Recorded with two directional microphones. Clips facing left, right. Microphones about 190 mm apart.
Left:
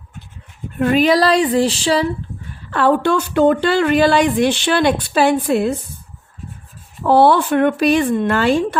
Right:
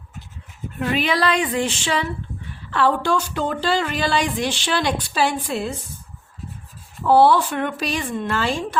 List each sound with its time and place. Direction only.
0.8 s speech: 45° left (ahead or behind)
2.6 s speech: 50° left (ahead or behind)
7.1 s speech: 60° left (ahead or behind)